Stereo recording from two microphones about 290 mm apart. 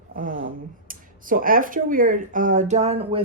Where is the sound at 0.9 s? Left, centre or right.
Right.